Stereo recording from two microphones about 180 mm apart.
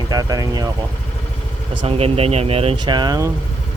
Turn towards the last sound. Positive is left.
turn(degrees=-20)  # may be behind; listen again after turning